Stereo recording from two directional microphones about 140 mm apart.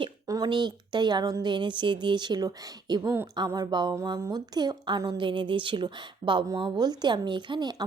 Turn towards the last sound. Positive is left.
turn(degrees=-30)  # may be behind; listen again after turning